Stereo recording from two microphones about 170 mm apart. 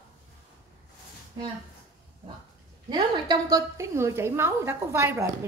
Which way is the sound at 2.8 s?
25° right (ahead or behind).